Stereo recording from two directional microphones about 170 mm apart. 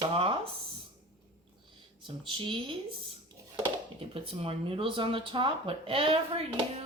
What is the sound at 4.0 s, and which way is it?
Speech, 35° right (ahead or behind).